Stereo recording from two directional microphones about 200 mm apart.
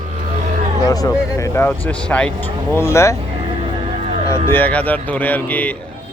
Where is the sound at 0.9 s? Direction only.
15° left (ahead or behind).